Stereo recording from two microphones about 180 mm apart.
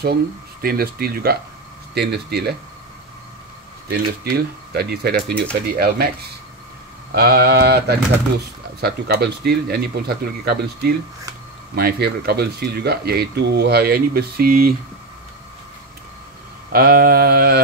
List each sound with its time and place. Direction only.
0.0 s speech: 55° right (ahead or behind)
3.9 s speech: 60° right (ahead or behind)
7.2 s speech: 65° right (ahead or behind)
16.7 s speech: 55° right (ahead or behind)